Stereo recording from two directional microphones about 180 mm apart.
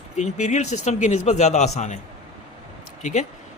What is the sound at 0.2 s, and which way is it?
A man's voice, 40° left (ahead or behind).